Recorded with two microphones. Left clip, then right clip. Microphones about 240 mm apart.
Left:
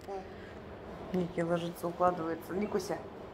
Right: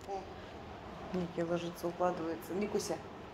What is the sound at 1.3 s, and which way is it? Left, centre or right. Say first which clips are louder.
Speech: left 2 dB; left.